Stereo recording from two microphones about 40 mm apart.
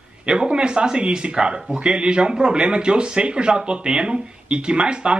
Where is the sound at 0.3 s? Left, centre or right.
Right.